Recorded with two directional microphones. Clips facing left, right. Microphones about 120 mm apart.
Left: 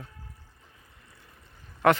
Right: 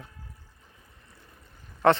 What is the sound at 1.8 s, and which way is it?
Speech, 30° right (ahead or behind).